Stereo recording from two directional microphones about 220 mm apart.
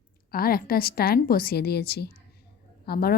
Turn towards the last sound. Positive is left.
turn(degrees=45)  # may be behind; listen again after turning